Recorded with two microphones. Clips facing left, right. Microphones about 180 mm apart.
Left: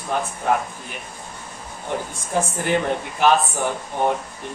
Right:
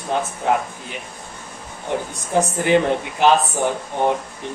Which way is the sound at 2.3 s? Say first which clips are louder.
Right 5 dB; 15° right (ahead or behind).